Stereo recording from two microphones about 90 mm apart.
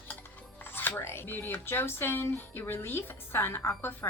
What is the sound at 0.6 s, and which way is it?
A woman's voice, 20° left (ahead or behind).